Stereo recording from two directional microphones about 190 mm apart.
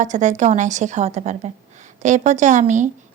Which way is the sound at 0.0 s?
40° right (ahead or behind).